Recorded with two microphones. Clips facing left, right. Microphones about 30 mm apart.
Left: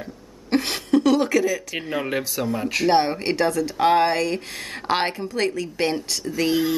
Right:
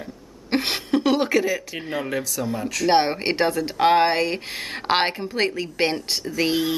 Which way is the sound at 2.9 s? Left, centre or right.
Right.